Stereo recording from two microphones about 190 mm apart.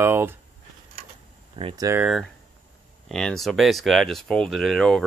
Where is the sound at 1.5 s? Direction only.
30° right (ahead or behind).